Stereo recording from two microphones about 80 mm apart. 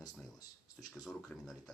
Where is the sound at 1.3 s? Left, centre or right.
Centre.